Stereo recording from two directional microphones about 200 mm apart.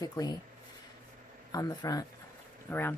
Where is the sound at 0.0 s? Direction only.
20° left (ahead or behind).